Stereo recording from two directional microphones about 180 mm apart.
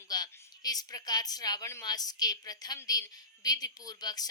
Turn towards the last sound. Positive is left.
turn(degrees=20)  # may be behind; listen again after turning